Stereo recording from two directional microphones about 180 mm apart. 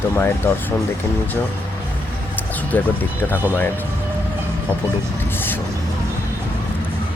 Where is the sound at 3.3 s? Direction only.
10° right (ahead or behind).